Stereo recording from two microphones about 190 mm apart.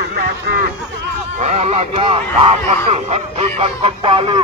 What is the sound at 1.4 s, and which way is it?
Speech, 35° right (ahead or behind).